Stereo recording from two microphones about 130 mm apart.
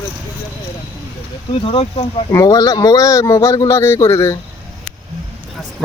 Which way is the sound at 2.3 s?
25° left (ahead or behind).